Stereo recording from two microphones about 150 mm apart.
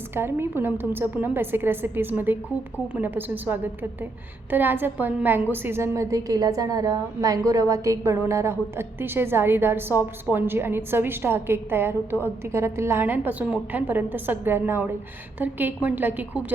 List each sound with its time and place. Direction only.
0.1 s a woman's voice: 15° right (ahead or behind)